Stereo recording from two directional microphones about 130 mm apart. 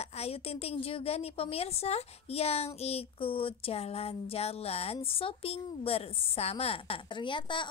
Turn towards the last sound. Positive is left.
turn(degrees=40)  # may be behind; listen again after turning